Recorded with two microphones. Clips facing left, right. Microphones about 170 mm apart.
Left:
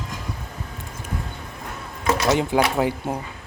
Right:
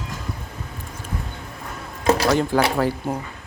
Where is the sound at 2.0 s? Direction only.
30° right (ahead or behind).